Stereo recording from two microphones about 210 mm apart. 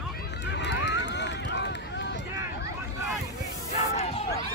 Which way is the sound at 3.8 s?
30° left (ahead or behind).